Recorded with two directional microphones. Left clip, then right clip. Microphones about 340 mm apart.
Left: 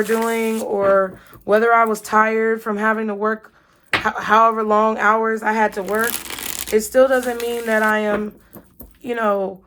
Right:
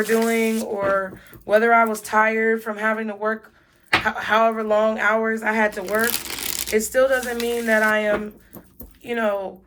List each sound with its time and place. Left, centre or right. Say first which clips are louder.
0.0 s speech: left 1 dB; centre